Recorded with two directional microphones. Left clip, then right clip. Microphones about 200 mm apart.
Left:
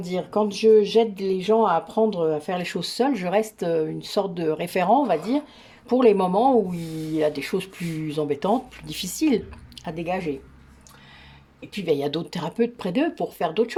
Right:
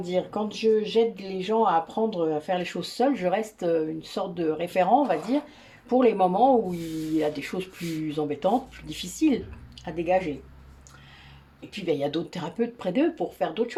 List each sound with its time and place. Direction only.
0.0 s speech: 50° left (ahead or behind)
11.7 s speech: 45° left (ahead or behind)